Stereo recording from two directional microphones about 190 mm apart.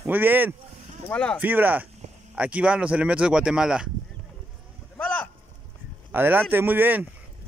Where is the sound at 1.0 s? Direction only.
5° left (ahead or behind).